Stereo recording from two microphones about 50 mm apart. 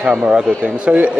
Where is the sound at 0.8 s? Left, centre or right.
Right.